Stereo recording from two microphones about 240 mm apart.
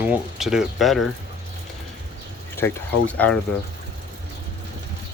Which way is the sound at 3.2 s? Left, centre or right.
Centre.